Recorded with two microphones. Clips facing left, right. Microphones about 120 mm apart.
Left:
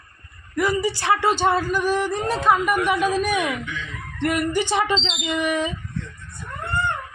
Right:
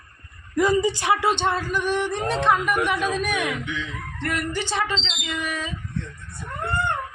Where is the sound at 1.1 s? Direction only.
Centre (ahead or behind); by 5.7 s 20° left (ahead or behind).